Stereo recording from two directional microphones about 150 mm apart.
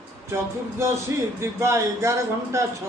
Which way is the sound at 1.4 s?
20° right (ahead or behind).